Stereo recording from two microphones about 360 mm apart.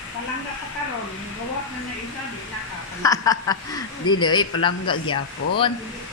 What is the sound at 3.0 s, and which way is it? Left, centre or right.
Speech, centre.